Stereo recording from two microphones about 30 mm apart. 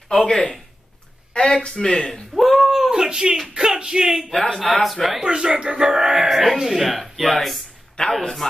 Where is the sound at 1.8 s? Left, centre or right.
Centre.